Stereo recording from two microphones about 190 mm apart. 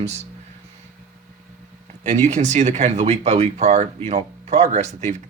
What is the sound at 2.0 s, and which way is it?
Speech, 40° right (ahead or behind).